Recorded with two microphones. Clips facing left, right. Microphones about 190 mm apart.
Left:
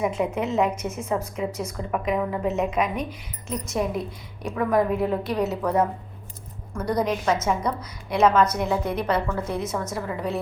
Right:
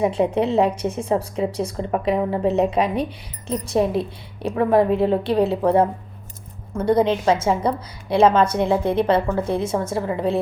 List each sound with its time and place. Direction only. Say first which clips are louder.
0.0 s a woman's voice: right 5 dB; 30° right (ahead or behind)